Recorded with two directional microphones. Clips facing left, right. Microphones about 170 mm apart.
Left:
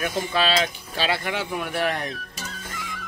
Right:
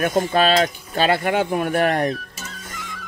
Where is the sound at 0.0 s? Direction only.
50° right (ahead or behind).